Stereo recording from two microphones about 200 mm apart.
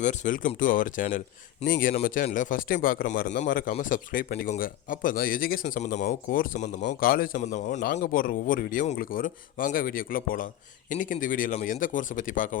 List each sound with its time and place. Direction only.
0.0 s speech: 35° left (ahead or behind)